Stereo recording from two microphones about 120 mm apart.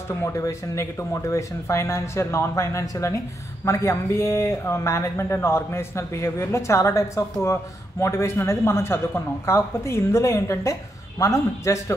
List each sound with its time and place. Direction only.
0.2 s a man's voice: 25° left (ahead or behind)